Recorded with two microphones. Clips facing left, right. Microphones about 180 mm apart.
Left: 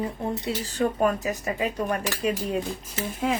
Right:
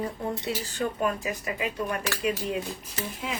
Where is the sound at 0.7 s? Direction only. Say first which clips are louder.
Left 6 dB; 40° left (ahead or behind).